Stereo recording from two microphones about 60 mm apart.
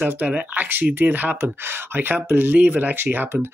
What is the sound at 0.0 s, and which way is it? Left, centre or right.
Speech, right.